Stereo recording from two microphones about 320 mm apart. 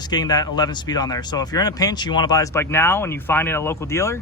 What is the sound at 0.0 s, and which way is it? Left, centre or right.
Speech, centre.